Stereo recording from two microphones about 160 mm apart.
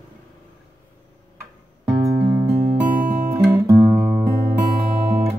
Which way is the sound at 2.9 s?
55° right (ahead or behind).